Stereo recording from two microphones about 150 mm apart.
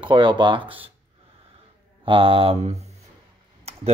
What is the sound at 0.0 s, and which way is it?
Speech, 30° right (ahead or behind).